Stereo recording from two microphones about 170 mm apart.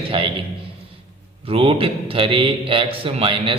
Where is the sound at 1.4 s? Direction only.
35° right (ahead or behind).